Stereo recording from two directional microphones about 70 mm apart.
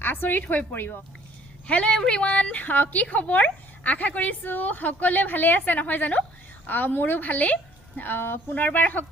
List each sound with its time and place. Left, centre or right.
0.0 s a woman's voice: left
1.6 s a woman's voice: centre